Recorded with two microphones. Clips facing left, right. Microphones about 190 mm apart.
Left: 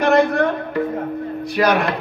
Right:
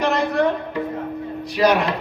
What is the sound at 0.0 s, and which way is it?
Music, 55° left (ahead or behind).